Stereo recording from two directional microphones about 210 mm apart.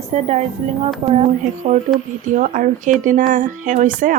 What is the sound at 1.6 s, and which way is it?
Speech, 35° right (ahead or behind).